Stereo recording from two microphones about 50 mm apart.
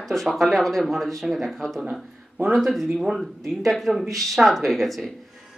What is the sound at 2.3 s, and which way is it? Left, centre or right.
Speech, right.